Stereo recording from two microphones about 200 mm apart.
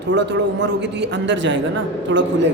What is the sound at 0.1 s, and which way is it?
A woman's voice, 65° right (ahead or behind).